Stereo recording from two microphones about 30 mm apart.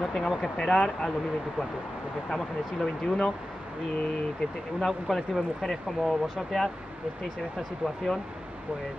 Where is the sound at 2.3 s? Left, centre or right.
Centre.